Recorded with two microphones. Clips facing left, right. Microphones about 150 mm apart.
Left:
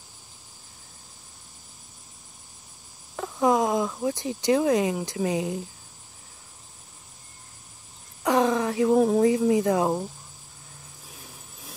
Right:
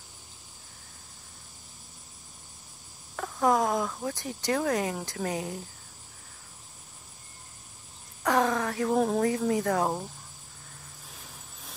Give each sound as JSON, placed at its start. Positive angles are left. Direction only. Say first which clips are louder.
{"t": 3.2, "sound": "speech", "louder": "left 3 dB", "side_deg": 15}
{"t": 8.2, "sound": "a sound", "louder": "left 4 dB", "side_deg": 15}
{"t": 8.9, "sound": "speech", "louder": "left 5 dB", "side_deg": 5}
{"t": 9.2, "sound": "speech", "louder": "left 6 dB", "side_deg": 15}
{"t": 11.1, "sound": "vehicle", "louder": "left 3 dB", "side_deg": 5}